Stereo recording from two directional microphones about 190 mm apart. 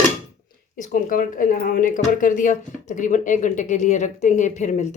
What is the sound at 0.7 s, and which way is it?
Speech, 45° left (ahead or behind).